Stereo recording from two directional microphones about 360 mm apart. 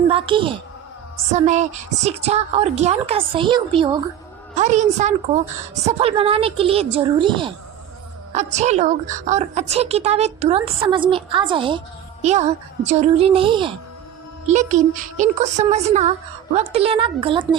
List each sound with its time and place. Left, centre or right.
0.1 s a woman's voice: centre